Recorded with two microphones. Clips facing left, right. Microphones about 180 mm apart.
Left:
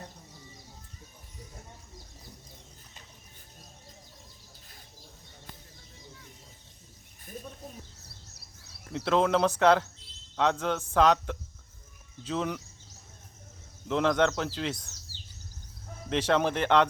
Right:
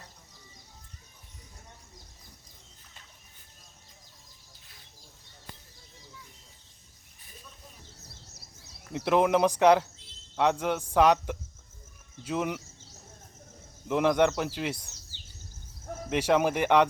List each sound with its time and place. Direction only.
8.9 s speech: 15° right (ahead or behind)
13.8 s speech: 15° right (ahead or behind)
16.0 s speech: 10° right (ahead or behind)